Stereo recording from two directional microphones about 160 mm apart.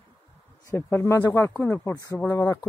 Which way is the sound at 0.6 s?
15° left (ahead or behind).